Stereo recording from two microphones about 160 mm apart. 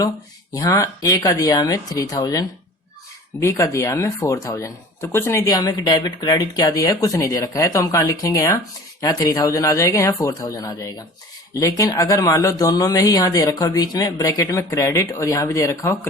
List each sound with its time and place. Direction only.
0.5 s speech: 20° left (ahead or behind)